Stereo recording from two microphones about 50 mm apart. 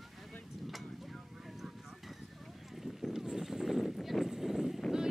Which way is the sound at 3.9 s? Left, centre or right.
Centre.